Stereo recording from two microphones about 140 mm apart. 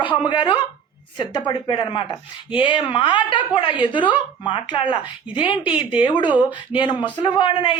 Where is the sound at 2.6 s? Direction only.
35° left (ahead or behind).